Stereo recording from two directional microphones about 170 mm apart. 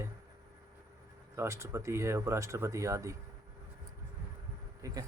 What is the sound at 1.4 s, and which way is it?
Speech, 15° right (ahead or behind).